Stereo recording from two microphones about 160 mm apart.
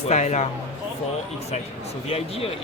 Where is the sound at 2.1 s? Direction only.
35° left (ahead or behind).